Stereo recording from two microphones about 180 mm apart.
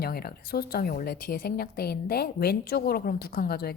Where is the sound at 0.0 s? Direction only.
60° left (ahead or behind).